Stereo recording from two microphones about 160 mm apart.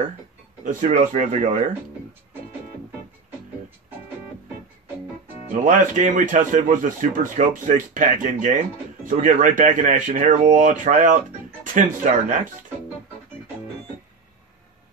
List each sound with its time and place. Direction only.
0.7 s speech: 50° right (ahead or behind)
5.5 s speech: 55° right (ahead or behind)